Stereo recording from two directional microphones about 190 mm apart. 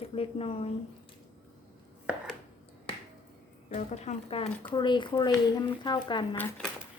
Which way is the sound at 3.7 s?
35° left (ahead or behind).